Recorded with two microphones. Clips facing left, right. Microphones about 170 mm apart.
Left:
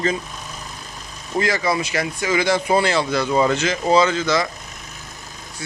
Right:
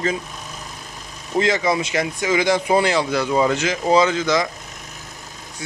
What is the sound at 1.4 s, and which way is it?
Speech, 20° right (ahead or behind).